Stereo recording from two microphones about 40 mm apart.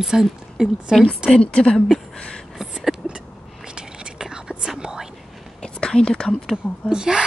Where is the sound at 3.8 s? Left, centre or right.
Centre.